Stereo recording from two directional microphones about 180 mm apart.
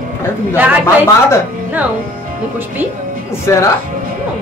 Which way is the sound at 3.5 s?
15° left (ahead or behind).